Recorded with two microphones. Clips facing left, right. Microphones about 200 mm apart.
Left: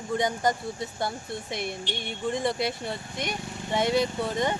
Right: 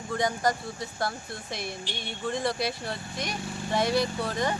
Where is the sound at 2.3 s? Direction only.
20° left (ahead or behind).